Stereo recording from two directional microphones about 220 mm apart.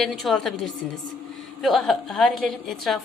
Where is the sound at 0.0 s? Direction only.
Centre (ahead or behind).